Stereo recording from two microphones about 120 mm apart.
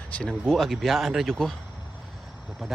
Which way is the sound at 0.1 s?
5° left (ahead or behind).